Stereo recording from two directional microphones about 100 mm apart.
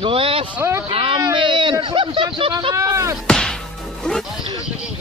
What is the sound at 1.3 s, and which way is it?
Speech, 50° right (ahead or behind).